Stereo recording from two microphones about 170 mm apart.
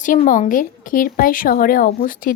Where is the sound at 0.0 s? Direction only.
50° left (ahead or behind).